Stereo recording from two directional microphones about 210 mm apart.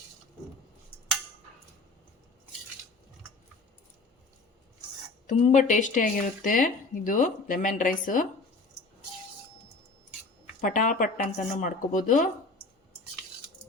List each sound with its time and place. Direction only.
5.2 s speech: 35° left (ahead or behind)
10.6 s speech: 40° left (ahead or behind)